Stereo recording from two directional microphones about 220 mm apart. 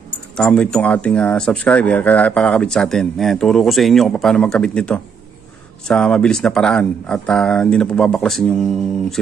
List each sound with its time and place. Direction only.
0.4 s speech: 5° left (ahead or behind)